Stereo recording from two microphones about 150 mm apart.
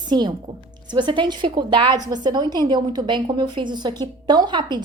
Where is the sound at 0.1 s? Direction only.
30° right (ahead or behind).